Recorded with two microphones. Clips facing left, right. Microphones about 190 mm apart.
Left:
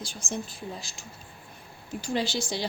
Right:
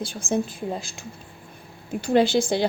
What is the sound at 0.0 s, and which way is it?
A woman's voice, 55° right (ahead or behind).